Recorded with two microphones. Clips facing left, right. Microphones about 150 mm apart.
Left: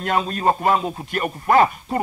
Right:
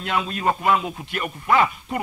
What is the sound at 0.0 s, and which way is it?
A man's voice, 40° left (ahead or behind).